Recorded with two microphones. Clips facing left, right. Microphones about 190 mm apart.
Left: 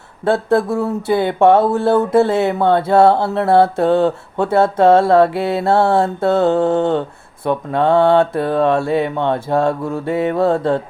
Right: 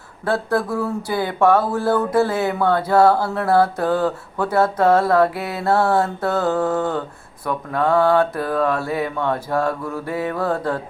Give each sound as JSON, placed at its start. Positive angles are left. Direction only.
{"t": 0.3, "sound": "speech", "side_deg": 25}